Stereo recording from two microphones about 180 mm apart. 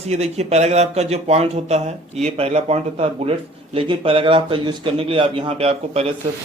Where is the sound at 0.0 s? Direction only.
35° right (ahead or behind).